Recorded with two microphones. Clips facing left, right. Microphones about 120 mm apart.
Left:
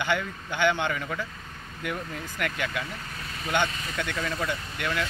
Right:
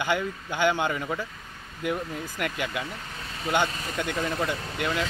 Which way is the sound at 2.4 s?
15° right (ahead or behind).